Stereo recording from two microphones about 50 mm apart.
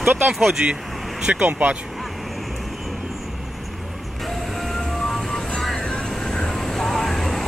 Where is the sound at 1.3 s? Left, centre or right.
Right.